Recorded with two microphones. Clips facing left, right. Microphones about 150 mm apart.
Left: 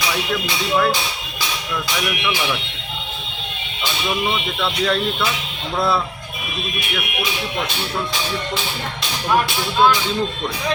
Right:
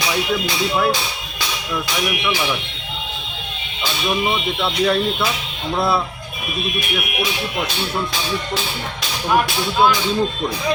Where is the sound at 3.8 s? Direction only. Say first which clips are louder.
Right 2 dB; 15° right (ahead or behind).